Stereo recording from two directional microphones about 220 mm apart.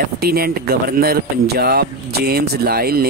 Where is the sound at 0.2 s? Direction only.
45° right (ahead or behind).